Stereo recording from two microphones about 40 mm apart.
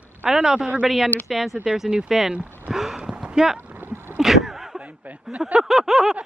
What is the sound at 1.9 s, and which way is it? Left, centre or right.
Speech, right.